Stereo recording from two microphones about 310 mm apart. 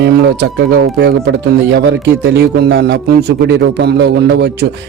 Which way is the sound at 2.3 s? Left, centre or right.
Right.